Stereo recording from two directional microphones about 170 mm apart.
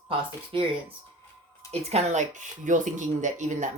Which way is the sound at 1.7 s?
40° right (ahead or behind).